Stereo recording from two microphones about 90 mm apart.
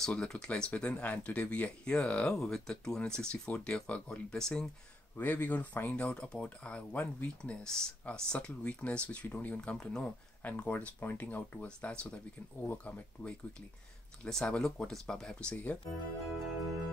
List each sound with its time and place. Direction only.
0.0 s speech: 5° left (ahead or behind)
5.1 s speech: 20° left (ahead or behind); by 15.3 s 5° left (ahead or behind)
15.5 s speech: 15° left (ahead or behind)